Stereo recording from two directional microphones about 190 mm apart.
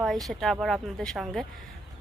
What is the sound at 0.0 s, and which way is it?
Speech, centre (ahead or behind).